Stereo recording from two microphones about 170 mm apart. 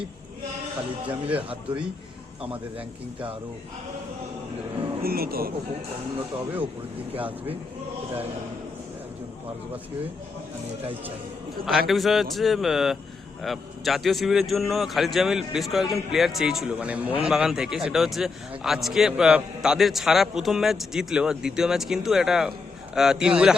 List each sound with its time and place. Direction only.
1.4 s speech: 35° right (ahead or behind)
5.0 s speech: 60° right (ahead or behind)
11.6 s a man's voice: centre (ahead or behind)